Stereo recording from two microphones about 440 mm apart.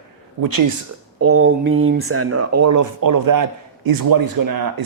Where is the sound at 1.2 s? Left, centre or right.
Right.